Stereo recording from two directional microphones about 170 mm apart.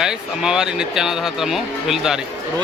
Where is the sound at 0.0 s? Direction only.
5° right (ahead or behind).